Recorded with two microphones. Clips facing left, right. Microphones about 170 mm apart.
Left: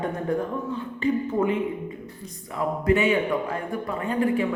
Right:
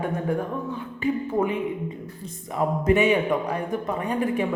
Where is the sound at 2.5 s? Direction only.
20° right (ahead or behind).